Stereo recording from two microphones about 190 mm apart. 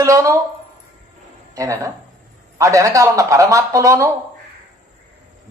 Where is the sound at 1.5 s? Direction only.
15° right (ahead or behind).